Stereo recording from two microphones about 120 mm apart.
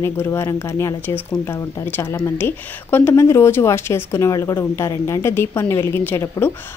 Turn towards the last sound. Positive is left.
turn(degrees=20)  # may be behind; listen again after turning